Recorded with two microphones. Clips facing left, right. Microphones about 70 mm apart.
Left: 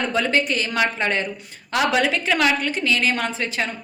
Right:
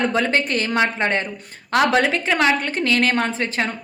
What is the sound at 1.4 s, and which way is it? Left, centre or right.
A woman's voice, right.